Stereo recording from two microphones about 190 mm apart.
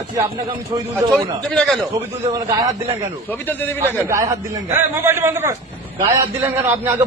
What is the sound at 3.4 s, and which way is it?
Speech, 10° left (ahead or behind).